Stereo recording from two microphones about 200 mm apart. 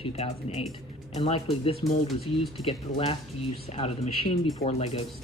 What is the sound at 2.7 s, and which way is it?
Speech, 25° left (ahead or behind).